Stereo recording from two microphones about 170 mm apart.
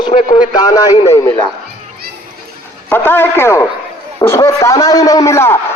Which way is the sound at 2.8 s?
10° left (ahead or behind).